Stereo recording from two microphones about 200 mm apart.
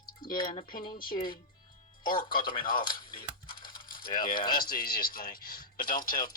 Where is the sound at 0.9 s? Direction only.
45° left (ahead or behind).